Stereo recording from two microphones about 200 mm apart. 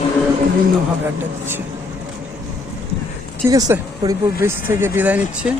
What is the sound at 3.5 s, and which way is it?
Speech, 15° right (ahead or behind).